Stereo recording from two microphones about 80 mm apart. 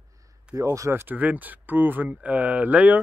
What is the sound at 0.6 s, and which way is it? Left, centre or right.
Speech, right.